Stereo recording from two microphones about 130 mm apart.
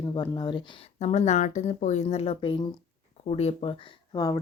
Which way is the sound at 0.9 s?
60° left (ahead or behind).